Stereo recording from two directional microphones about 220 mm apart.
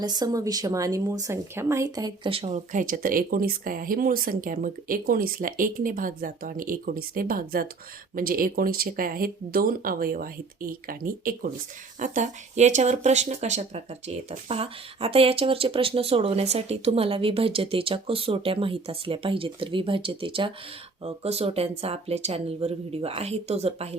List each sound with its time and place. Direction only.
0.0 s a woman's voice: 20° right (ahead or behind)